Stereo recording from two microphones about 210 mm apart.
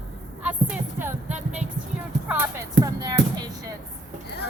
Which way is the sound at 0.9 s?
10° right (ahead or behind).